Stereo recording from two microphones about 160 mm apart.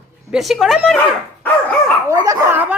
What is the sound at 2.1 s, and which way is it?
Speech, 20° right (ahead or behind).